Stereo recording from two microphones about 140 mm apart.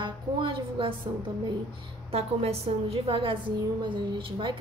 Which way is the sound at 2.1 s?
45° right (ahead or behind).